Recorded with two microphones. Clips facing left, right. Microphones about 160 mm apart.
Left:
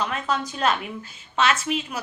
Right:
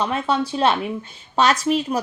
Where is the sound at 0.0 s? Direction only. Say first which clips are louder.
Right 5 dB; 30° right (ahead or behind).